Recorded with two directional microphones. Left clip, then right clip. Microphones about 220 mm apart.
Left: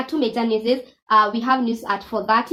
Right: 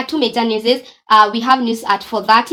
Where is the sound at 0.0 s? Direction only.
30° right (ahead or behind).